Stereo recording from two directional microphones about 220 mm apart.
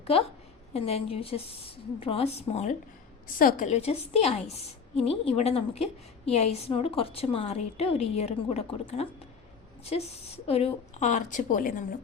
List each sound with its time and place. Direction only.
0.7 s a woman's voice: 25° left (ahead or behind)